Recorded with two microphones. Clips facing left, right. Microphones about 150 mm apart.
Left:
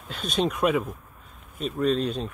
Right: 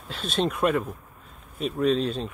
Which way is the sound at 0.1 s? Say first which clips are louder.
Even; centre (ahead or behind).